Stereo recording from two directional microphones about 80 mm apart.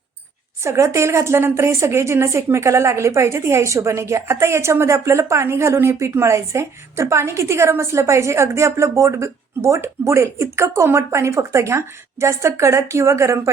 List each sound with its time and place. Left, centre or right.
0.6 s a woman's voice: right